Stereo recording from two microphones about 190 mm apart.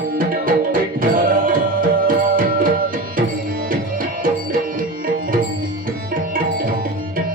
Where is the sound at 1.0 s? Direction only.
45° right (ahead or behind).